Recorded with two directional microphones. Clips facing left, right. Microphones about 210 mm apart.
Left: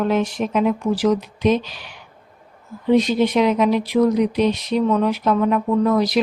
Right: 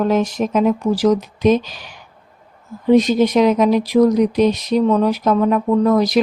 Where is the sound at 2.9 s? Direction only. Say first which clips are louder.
Right 3 dB; 45° right (ahead or behind).